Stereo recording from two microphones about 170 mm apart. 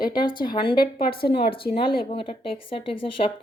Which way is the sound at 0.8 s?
60° left (ahead or behind).